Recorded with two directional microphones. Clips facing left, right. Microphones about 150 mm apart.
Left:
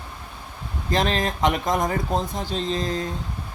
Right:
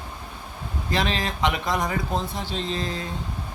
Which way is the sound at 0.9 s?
45° left (ahead or behind).